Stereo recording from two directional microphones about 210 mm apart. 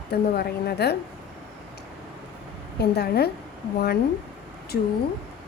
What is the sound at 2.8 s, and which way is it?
Speech, 50° left (ahead or behind).